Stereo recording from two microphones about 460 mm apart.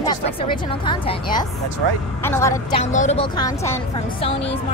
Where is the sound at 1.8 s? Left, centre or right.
Right.